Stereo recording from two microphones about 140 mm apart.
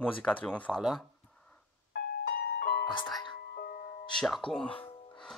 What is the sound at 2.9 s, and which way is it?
Speech, 30° left (ahead or behind).